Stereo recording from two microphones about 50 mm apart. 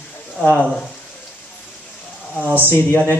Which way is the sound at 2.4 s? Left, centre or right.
Right.